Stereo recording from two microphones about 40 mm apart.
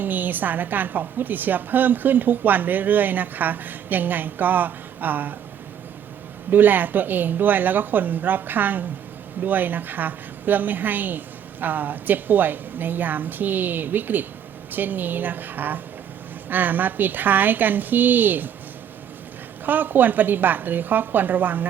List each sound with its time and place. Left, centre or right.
0.0 s a woman's voice: right
6.5 s a woman's voice: right
19.6 s a woman's voice: right